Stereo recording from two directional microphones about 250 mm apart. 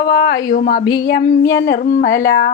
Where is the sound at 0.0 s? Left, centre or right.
Left.